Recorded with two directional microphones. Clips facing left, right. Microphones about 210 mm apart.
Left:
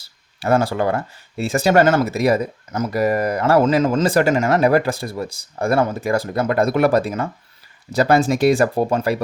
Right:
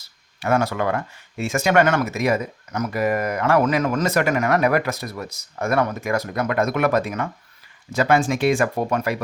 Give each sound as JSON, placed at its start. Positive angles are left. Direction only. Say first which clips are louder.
{"t": 0.0, "sound": "speech", "louder": "left 3 dB", "side_deg": 35}